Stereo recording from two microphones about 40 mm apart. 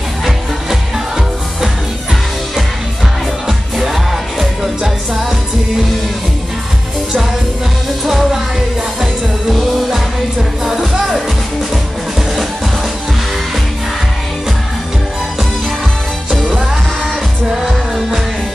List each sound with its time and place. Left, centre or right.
0.2 s music: centre
3.4 s music: centre
8.0 s music: centre